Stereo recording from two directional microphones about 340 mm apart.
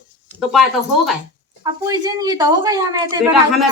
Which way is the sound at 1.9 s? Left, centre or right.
Centre.